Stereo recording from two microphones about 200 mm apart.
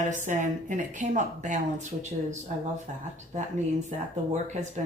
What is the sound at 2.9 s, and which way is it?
Speech, 35° right (ahead or behind).